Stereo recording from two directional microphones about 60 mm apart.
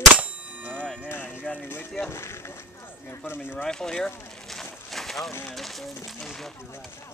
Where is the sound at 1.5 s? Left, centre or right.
Left.